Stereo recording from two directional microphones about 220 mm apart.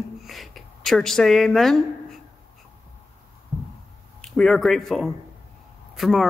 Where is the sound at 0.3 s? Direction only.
Centre (ahead or behind).